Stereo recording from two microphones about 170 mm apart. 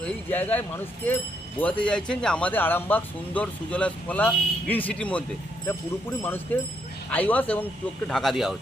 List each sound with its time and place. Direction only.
0.0 s speech: 10° left (ahead or behind)